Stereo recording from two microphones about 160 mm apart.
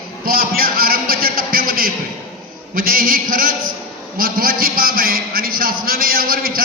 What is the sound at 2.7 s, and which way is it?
A man's voice, 60° right (ahead or behind).